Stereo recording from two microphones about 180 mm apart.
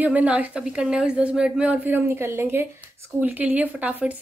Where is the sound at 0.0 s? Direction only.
10° right (ahead or behind).